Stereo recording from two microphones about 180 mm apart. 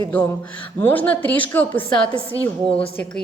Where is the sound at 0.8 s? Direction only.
10° left (ahead or behind).